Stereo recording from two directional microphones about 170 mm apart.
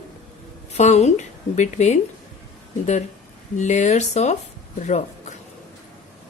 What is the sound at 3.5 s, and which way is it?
A man's voice, 45° left (ahead or behind).